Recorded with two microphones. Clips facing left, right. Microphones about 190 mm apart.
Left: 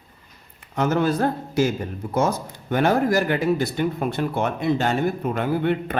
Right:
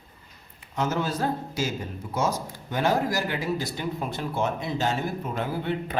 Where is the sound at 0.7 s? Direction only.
60° left (ahead or behind).